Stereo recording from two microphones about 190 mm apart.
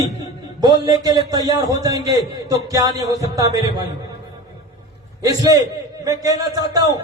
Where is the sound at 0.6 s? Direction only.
20° right (ahead or behind).